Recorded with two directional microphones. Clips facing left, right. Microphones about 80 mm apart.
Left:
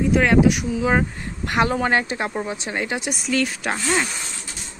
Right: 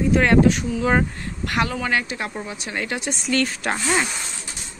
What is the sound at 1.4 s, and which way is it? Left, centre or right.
Speech, left.